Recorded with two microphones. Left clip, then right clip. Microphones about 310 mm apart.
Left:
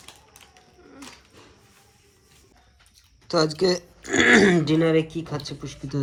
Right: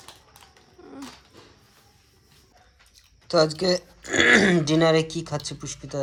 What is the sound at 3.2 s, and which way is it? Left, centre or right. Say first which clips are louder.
Speech: right 1 dB; centre.